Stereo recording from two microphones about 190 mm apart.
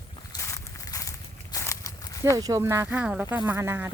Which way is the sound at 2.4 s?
15° right (ahead or behind).